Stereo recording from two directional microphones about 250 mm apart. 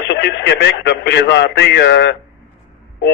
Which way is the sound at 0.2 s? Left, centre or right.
Left.